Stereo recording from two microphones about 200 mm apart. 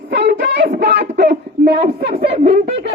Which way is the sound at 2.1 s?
30° right (ahead or behind).